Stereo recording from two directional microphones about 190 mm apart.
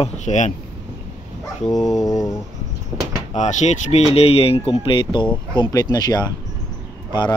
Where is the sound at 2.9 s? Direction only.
10° right (ahead or behind).